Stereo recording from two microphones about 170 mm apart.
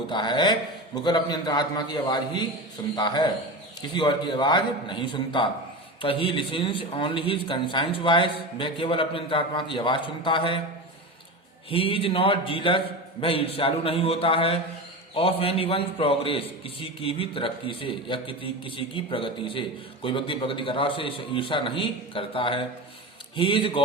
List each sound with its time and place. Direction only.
0.1 s a man's voice: 25° left (ahead or behind)
11.7 s a man's voice: 35° left (ahead or behind)